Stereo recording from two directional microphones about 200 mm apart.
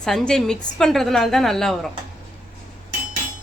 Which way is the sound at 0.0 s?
Centre (ahead or behind).